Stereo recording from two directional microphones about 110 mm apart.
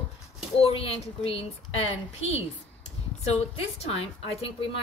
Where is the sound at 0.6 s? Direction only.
60° left (ahead or behind).